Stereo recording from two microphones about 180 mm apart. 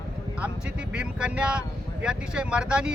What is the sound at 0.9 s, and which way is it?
Speech, 5° right (ahead or behind).